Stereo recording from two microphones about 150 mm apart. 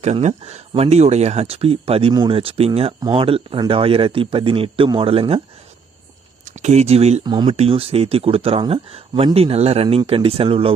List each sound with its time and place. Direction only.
0.0 s speech: 50° right (ahead or behind)
6.4 s speech: 50° right (ahead or behind)
7.3 s speech: 30° right (ahead or behind)
7.5 s speech: 40° right (ahead or behind)